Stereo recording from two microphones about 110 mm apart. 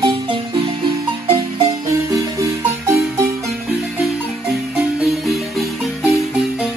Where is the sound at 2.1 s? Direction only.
30° right (ahead or behind).